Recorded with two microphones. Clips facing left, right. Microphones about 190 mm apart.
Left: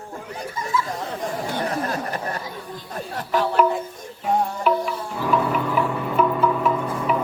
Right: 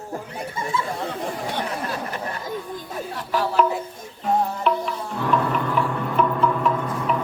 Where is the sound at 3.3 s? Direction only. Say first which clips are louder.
Left 1 dB; 5° right (ahead or behind).